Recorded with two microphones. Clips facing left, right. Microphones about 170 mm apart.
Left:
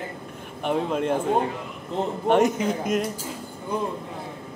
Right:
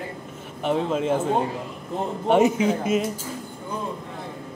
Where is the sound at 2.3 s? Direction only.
10° right (ahead or behind).